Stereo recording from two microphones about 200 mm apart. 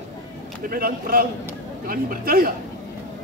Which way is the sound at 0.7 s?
45° right (ahead or behind).